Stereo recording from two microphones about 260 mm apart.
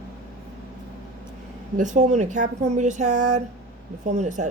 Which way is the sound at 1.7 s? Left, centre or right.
Right.